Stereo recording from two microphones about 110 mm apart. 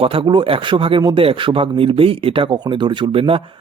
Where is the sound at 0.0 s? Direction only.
55° right (ahead or behind).